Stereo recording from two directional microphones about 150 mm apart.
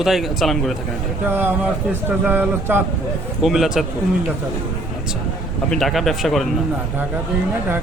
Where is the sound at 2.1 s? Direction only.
15° right (ahead or behind).